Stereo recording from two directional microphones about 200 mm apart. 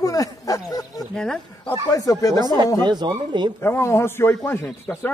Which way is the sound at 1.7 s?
20° left (ahead or behind).